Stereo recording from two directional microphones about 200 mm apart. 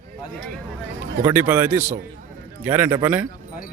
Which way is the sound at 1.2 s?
10° right (ahead or behind).